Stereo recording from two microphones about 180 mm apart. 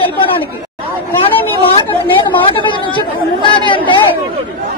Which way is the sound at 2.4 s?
25° left (ahead or behind).